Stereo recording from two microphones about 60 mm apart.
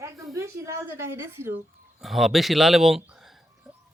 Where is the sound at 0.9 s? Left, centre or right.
Right.